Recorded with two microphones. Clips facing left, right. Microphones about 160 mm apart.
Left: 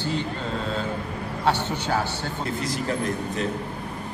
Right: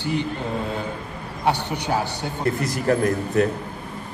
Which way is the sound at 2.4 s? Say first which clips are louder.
Right 7 dB; 60° right (ahead or behind).